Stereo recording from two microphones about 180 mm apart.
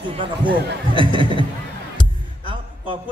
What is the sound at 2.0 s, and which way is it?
Music, 25° left (ahead or behind).